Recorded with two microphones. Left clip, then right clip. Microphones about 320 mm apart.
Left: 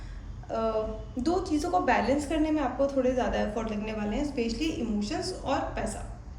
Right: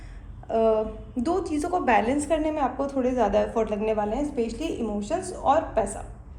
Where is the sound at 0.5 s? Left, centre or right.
Right.